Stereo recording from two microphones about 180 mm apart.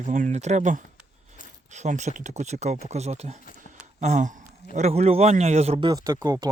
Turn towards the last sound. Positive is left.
turn(degrees=-20)  # may be behind; listen again after turning